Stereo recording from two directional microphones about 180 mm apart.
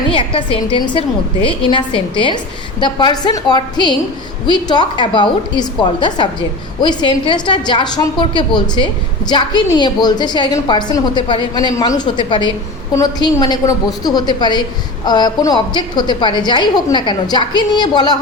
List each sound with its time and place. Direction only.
0.1 s a woman's voice: 30° left (ahead or behind)